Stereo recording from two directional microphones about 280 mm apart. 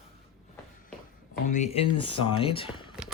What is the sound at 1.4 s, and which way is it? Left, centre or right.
Speech, left.